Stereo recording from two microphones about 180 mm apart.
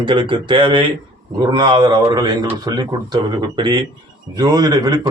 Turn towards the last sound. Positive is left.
turn(degrees=-20)  # may be behind; listen again after turning